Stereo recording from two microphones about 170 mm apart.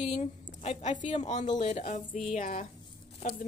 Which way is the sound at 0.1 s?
40° left (ahead or behind).